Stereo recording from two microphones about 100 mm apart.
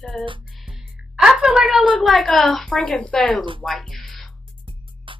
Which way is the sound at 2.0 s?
Centre (ahead or behind).